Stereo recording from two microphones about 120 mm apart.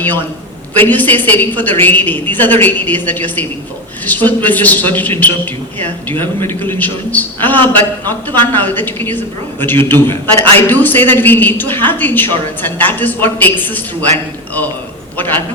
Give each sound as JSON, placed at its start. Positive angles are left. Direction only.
{"t": 0.8, "sound": "a man's voice", "side_deg": 15}